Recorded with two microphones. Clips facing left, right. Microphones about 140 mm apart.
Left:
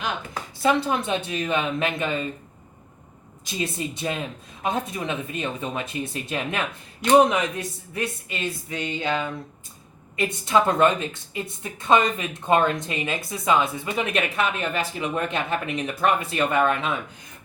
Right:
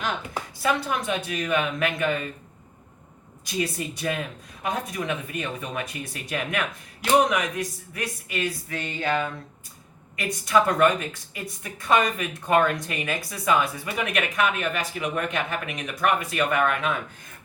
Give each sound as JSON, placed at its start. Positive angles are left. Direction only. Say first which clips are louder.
{"t": 0.6, "sound": "speech", "louder": "left 4 dB", "side_deg": 25}
{"t": 3.4, "sound": "speech", "louder": "even", "side_deg": 25}
{"t": 10.2, "sound": "speech", "louder": "left 1 dB", "side_deg": 25}